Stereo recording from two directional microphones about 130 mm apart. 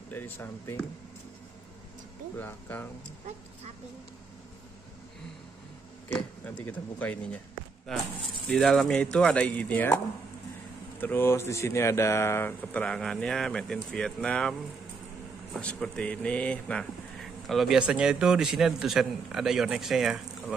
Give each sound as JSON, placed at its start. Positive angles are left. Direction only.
{"t": 0.1, "sound": "speech", "side_deg": 15}
{"t": 2.3, "sound": "speech", "side_deg": 15}
{"t": 6.6, "sound": "speech", "side_deg": 15}
{"t": 8.5, "sound": "speech", "side_deg": 0}
{"t": 11.0, "sound": "speech", "side_deg": 15}
{"t": 15.6, "sound": "speech", "side_deg": 10}